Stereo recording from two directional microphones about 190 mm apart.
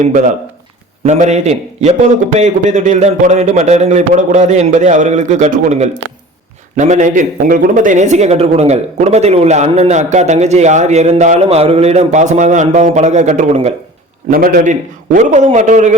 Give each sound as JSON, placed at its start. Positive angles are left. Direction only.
{"t": 1.0, "sound": "speech", "side_deg": -40}
{"t": 14.3, "sound": "a man's voice", "side_deg": -50}